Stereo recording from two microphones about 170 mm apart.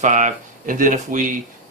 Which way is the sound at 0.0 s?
45° right (ahead or behind).